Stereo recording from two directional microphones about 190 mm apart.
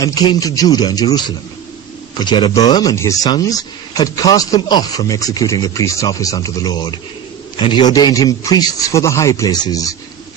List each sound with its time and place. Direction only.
0.0 s speech: 20° left (ahead or behind)